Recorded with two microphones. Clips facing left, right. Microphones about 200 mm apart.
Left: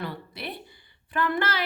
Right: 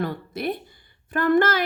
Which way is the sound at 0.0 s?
45° right (ahead or behind).